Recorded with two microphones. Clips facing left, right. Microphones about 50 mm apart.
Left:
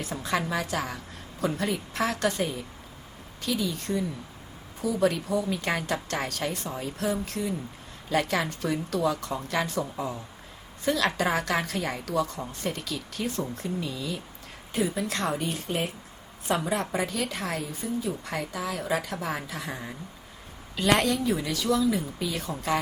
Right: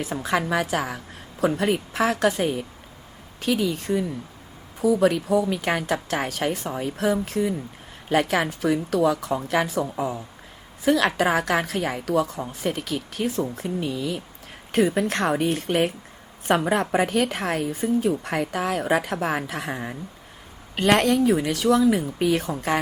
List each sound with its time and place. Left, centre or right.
0.0 s a woman's voice: right
2.4 s a woman's voice: right
3.4 s a woman's voice: right
6.4 s a woman's voice: right
10.8 s a woman's voice: right
12.4 s a woman's voice: right